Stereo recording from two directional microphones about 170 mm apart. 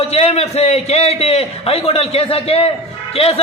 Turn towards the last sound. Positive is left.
turn(degrees=35)  # may be behind; listen again after turning